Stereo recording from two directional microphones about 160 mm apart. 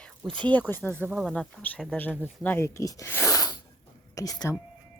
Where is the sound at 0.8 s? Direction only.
5° left (ahead or behind).